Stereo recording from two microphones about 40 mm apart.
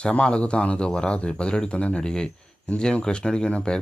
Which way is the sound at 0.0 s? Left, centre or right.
Left.